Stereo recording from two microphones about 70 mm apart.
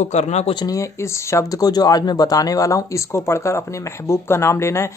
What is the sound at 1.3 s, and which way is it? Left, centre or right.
Speech, left.